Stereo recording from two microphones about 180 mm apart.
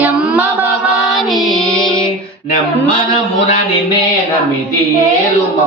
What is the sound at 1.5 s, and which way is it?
Music, centre (ahead or behind).